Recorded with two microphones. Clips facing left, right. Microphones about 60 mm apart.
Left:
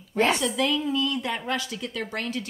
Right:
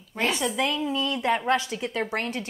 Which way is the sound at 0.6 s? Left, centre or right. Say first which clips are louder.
Left 1 dB; centre.